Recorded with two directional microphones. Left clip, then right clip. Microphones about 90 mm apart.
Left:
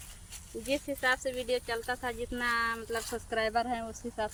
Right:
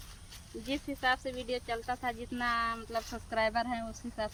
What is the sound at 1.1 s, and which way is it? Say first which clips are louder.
Speech: left 4 dB; 30° left (ahead or behind).